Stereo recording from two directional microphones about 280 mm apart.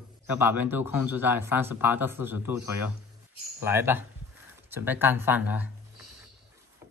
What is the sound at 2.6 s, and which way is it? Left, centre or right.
Speech, left.